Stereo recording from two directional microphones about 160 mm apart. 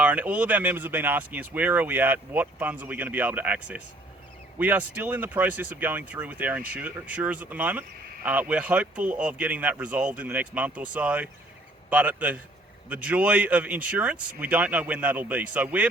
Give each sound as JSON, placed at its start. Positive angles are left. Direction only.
{"t": 0.0, "sound": "speech", "side_deg": -10}